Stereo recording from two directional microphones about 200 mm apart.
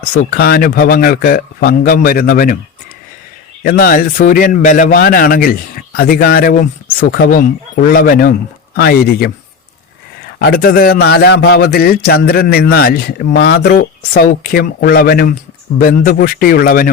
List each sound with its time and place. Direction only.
0.0 s a man's voice: 50° left (ahead or behind)
3.6 s a man's voice: 45° left (ahead or behind)
10.4 s a man's voice: 50° left (ahead or behind)